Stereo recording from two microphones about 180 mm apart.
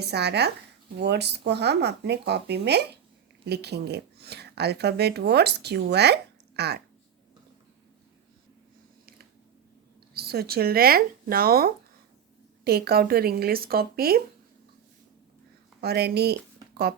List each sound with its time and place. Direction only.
0.0 s speech: 65° right (ahead or behind)
10.2 s speech: 60° right (ahead or behind)
15.8 s speech: 65° right (ahead or behind)